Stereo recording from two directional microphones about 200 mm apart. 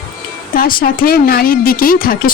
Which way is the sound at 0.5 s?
45° left (ahead or behind).